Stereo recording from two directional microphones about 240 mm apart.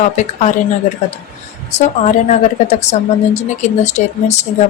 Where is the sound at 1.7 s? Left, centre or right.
Left.